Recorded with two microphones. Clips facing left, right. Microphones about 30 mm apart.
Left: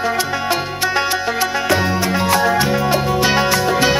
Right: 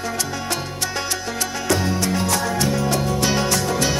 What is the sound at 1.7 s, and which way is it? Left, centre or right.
Music, left.